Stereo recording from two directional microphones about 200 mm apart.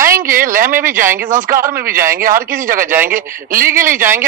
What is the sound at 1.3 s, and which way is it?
Speech, 45° right (ahead or behind).